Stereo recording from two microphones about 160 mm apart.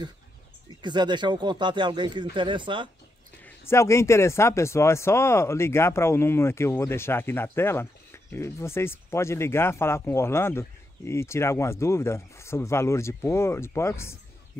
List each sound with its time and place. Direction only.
0.8 s speech: 30° right (ahead or behind)
3.4 s speech: 15° left (ahead or behind)